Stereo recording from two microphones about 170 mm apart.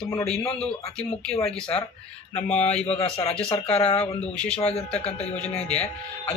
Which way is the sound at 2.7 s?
35° left (ahead or behind).